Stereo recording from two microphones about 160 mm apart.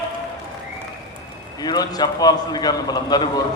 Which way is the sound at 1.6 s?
25° left (ahead or behind).